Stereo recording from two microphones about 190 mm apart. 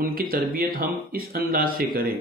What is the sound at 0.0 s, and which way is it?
Speech, 50° right (ahead or behind).